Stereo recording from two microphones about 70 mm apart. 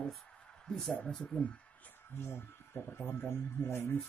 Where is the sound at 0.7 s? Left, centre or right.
Centre.